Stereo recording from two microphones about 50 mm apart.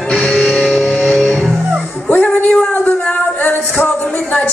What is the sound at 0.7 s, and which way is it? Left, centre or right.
Music, left.